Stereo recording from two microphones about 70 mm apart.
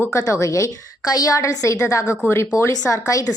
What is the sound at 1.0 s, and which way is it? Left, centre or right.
A woman's voice, left.